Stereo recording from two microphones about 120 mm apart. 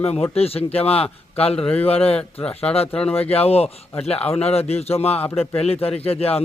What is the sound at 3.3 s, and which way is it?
Speech, 55° left (ahead or behind).